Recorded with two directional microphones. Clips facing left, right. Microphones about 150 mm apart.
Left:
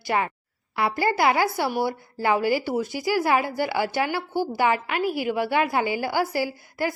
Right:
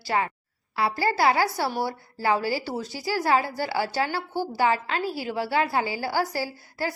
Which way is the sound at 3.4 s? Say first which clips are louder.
Left 2 dB; 15° left (ahead or behind).